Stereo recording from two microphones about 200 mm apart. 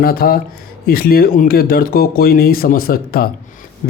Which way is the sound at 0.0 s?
50° left (ahead or behind).